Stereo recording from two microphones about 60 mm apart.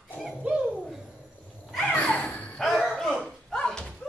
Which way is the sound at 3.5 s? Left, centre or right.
Centre.